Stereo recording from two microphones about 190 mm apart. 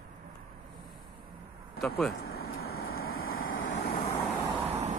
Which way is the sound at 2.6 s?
90° left.